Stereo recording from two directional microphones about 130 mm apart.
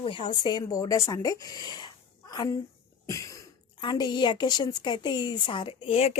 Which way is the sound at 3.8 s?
35° left (ahead or behind).